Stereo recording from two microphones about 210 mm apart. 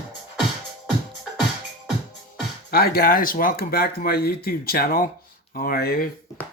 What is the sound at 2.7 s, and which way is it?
Speech, 45° left (ahead or behind).